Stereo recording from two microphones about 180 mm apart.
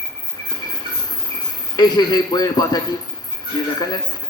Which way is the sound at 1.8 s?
20° left (ahead or behind).